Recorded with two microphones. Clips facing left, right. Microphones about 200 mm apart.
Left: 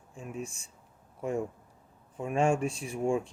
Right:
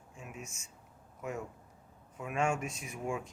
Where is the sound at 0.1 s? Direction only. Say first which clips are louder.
Left 8 dB; 30° left (ahead or behind).